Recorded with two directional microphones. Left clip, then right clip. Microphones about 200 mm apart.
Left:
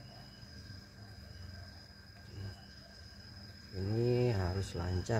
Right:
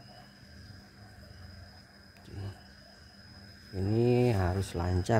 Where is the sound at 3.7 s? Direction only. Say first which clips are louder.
Right 6 dB; 45° right (ahead or behind).